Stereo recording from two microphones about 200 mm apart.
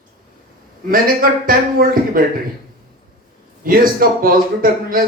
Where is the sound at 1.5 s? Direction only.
45° right (ahead or behind).